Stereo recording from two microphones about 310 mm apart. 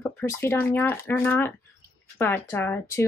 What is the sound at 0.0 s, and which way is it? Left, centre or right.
Speech, centre.